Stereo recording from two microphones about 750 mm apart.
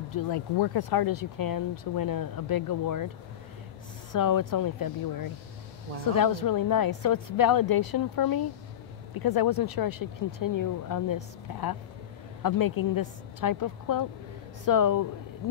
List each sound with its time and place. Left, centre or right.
0.1 s speech: left
4.1 s speech: left
12.4 s speech: left